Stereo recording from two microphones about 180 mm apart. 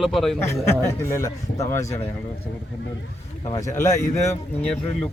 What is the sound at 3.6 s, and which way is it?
Speech, 40° left (ahead or behind).